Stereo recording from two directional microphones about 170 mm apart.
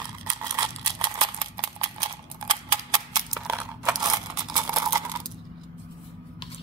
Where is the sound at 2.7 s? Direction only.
25° right (ahead or behind).